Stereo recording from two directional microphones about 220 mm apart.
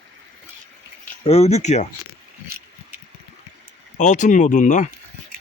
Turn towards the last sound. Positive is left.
turn(degrees=35)  # may be behind; listen again after turning